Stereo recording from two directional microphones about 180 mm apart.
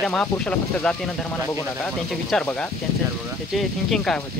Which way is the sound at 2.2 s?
5° left (ahead or behind).